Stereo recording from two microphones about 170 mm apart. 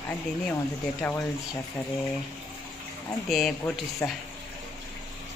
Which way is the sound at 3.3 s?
Centre (ahead or behind).